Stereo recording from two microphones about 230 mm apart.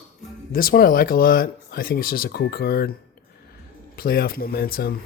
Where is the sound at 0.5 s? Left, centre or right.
Left.